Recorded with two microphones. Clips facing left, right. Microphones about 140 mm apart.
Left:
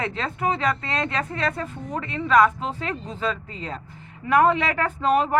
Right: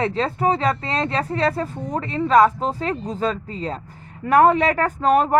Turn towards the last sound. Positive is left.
turn(degrees=-45)  # may be behind; listen again after turning